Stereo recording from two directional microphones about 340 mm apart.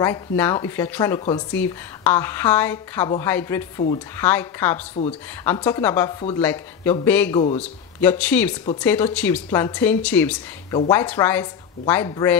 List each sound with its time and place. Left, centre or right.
0.0 s a woman's voice: centre
5.0 s speech: centre
5.4 s a woman's voice: centre